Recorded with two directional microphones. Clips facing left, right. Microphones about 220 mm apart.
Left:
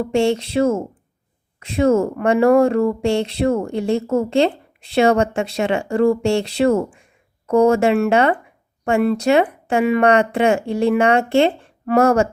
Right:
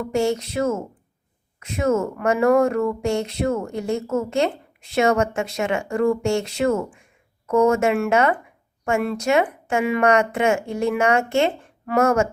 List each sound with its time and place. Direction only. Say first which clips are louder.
0.0 s speech: left 4 dB; 30° left (ahead or behind)